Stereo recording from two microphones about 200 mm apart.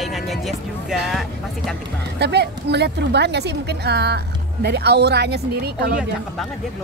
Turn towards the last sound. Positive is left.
turn(degrees=-50)  # may be behind; listen again after turning